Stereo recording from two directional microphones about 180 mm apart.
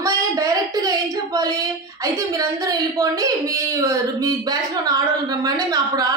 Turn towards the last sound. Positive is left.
turn(degrees=-20)  # may be behind; listen again after turning